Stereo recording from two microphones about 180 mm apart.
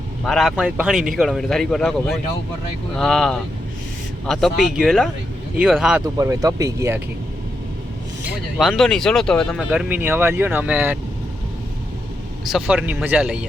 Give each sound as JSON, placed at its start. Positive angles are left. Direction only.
{"t": 0.3, "sound": "a man's voice", "side_deg": 0}
{"t": 6.1, "sound": "speech", "side_deg": -20}
{"t": 8.2, "sound": "a man's voice", "side_deg": 0}
{"t": 9.6, "sound": "speech", "side_deg": -10}
{"t": 12.5, "sound": "a man's voice", "side_deg": -5}